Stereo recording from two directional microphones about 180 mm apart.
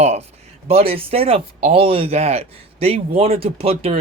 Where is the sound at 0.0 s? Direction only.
35° right (ahead or behind).